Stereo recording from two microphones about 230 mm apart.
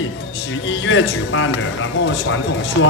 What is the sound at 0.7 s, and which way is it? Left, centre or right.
Speech, left.